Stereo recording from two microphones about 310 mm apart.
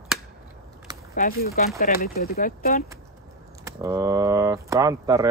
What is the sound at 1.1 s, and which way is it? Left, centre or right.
Speech, left.